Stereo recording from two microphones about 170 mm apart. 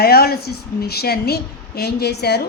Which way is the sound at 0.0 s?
65° left (ahead or behind).